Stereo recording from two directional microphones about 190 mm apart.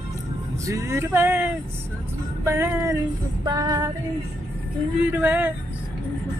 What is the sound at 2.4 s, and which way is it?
Music, 15° right (ahead or behind).